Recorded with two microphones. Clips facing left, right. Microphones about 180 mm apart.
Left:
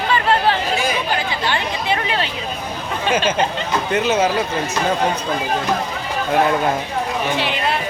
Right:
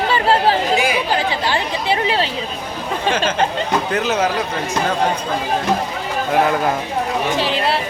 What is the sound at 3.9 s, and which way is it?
Speech, centre (ahead or behind).